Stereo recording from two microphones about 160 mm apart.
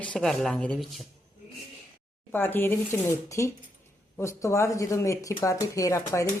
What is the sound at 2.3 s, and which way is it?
Speech, 15° left (ahead or behind).